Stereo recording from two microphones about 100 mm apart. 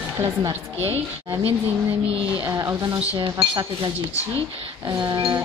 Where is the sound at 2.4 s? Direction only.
30° right (ahead or behind).